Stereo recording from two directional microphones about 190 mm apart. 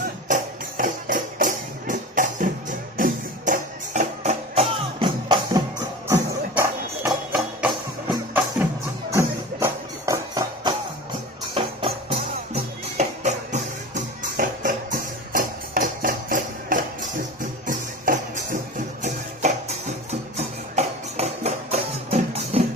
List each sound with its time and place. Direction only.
0.8 s music: 45° right (ahead or behind); by 5.6 s 25° right (ahead or behind)
6.1 s music: 10° right (ahead or behind); by 22.6 s 35° right (ahead or behind)